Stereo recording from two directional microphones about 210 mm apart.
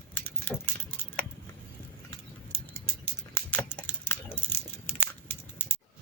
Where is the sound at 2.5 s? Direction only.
10° left (ahead or behind).